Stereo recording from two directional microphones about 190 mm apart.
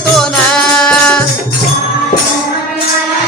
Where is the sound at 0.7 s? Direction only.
5° left (ahead or behind).